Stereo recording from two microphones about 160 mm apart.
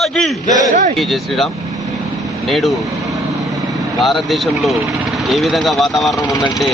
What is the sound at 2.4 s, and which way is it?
Speech, centre (ahead or behind).